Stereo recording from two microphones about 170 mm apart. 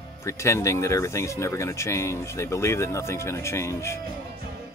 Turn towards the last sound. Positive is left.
turn(degrees=15)  # may be behind; listen again after turning